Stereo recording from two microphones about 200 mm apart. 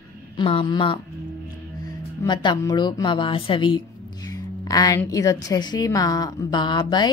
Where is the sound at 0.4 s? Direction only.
25° left (ahead or behind).